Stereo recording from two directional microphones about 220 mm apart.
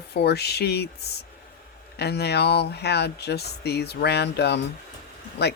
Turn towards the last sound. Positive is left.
turn(degrees=50)  # may be behind; listen again after turning